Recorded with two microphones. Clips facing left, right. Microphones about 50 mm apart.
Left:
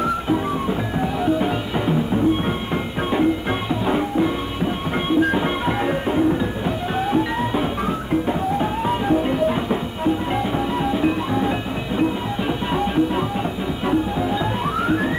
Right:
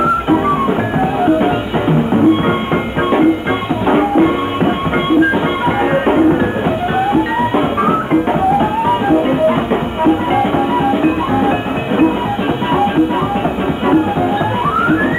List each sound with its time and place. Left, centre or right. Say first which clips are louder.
1.2 s music: right 7 dB; right
5.9 s music: right 9 dB; right
12.7 s music: right 7 dB; right